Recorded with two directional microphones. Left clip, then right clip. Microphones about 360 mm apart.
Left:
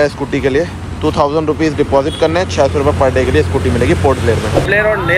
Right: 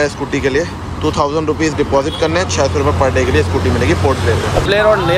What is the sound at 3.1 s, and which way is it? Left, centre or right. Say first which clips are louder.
Speech: left 1 dB; right.